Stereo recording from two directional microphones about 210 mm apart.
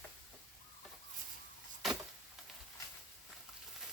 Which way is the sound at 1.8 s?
Centre (ahead or behind).